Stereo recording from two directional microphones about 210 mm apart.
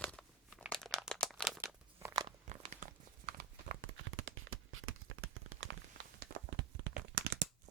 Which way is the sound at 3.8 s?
70° right (ahead or behind).